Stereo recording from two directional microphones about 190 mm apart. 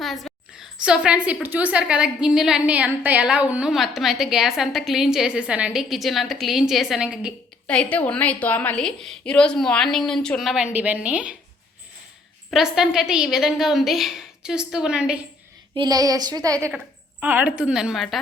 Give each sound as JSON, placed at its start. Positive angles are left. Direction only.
{"t": 0.0, "sound": "a sound", "side_deg": 0}
{"t": 0.9, "sound": "a woman's voice", "side_deg": -5}
{"t": 7.7, "sound": "a woman's voice", "side_deg": 5}
{"t": 12.5, "sound": "a woman's voice", "side_deg": 0}
{"t": 15.7, "sound": "speech", "side_deg": -20}
{"t": 16.7, "sound": "a woman's voice", "side_deg": -10}